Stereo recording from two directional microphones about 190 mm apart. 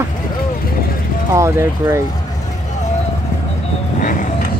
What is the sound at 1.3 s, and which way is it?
Speech, 15° right (ahead or behind).